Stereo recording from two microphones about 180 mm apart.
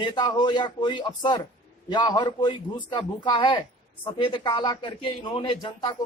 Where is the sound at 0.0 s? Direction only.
25° left (ahead or behind).